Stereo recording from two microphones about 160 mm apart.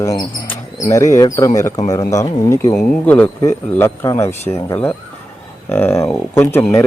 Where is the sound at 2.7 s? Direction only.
5° left (ahead or behind).